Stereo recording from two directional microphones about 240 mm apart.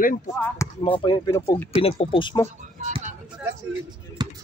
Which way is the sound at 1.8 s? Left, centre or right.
Left.